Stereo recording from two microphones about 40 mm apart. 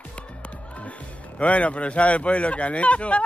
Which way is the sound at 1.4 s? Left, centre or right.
Left.